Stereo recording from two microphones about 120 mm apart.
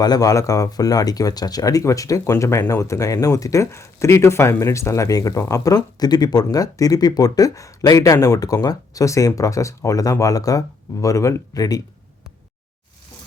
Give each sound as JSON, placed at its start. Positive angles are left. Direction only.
{"t": 0.0, "sound": "speech", "side_deg": 30}